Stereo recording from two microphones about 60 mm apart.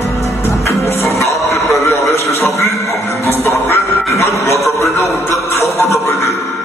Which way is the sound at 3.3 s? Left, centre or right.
Left.